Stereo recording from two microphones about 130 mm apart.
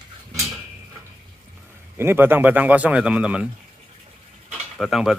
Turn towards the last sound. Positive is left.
turn(degrees=-5)  # may be behind; listen again after turning